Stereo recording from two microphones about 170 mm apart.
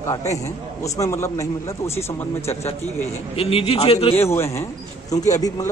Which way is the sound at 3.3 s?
35° left (ahead or behind).